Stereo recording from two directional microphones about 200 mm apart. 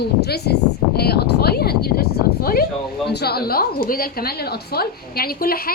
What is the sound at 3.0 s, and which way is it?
A woman's voice, 55° left (ahead or behind).